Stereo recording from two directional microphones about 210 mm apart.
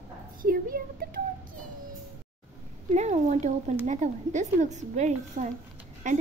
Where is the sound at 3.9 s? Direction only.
35° right (ahead or behind).